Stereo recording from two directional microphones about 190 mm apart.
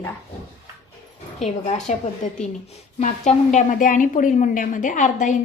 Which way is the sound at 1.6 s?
35° left (ahead or behind).